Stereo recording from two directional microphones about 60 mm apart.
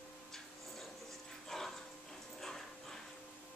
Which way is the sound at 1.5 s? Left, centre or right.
Centre.